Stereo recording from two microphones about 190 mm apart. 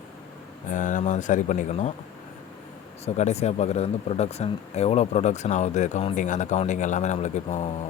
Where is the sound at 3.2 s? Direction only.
35° left (ahead or behind).